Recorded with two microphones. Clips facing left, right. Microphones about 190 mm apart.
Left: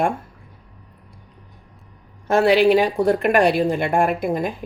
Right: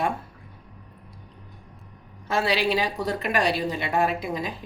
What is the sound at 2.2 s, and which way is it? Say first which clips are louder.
Speech: left 9 dB; 55° left (ahead or behind).